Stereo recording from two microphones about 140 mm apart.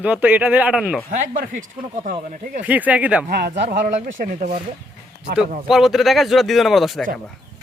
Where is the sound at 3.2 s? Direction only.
85° right.